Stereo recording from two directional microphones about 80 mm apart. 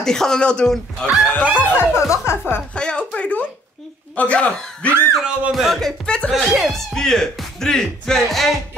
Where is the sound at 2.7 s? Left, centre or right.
Centre.